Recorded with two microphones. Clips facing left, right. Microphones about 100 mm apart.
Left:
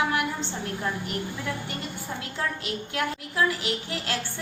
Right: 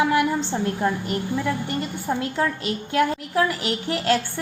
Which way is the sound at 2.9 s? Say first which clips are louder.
Right 10 dB; 45° right (ahead or behind).